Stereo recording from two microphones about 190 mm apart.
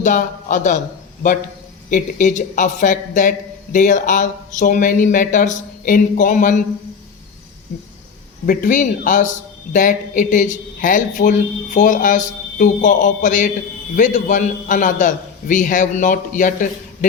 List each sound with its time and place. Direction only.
0.0 s a man's voice: 40° left (ahead or behind)
1.9 s a man's voice: 40° left (ahead or behind)
8.4 s a man's voice: 45° left (ahead or behind)